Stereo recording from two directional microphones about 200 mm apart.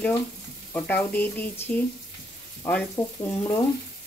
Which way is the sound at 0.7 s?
10° left (ahead or behind).